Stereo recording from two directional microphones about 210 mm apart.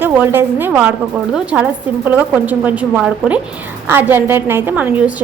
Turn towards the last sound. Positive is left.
turn(degrees=-5)  # may be behind; listen again after turning